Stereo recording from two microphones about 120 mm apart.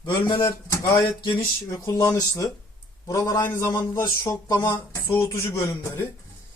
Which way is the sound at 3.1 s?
25° left (ahead or behind).